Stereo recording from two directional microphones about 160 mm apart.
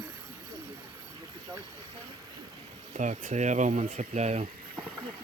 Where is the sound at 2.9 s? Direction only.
50° right (ahead or behind).